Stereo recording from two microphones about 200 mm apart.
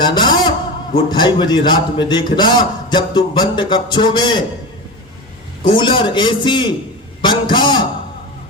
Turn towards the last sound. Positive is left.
turn(degrees=25)  # may be behind; listen again after turning